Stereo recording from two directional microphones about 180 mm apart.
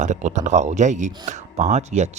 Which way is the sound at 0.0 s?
40° right (ahead or behind).